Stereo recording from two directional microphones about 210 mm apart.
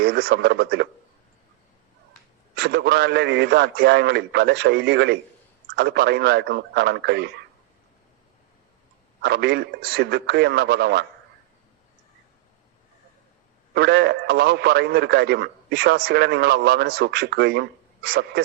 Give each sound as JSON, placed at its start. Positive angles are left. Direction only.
{"t": 0.0, "sound": "a man's voice", "side_deg": -50}
{"t": 2.6, "sound": "a man's voice", "side_deg": -50}
{"t": 9.2, "sound": "a man's voice", "side_deg": -50}
{"t": 13.7, "sound": "a man's voice", "side_deg": -50}